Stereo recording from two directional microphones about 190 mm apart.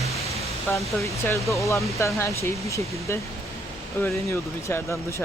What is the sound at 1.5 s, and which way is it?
Speech, 15° left (ahead or behind).